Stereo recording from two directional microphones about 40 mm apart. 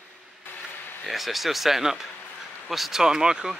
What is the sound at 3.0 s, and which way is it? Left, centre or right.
Speech, centre.